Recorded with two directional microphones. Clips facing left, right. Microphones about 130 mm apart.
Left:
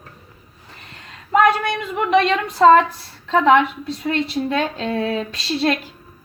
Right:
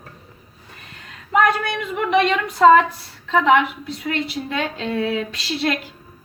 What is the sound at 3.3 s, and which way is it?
Speech, 35° left (ahead or behind).